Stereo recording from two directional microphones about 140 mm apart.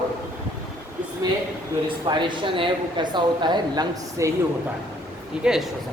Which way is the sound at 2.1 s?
35° right (ahead or behind).